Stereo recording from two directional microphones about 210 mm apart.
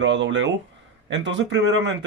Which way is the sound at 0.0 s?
60° right (ahead or behind).